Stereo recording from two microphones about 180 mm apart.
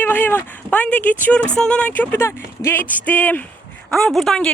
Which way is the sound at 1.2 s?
5° left (ahead or behind).